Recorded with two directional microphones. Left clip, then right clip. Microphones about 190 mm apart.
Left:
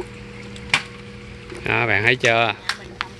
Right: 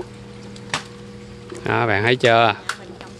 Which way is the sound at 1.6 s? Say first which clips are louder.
Even; 20° right (ahead or behind).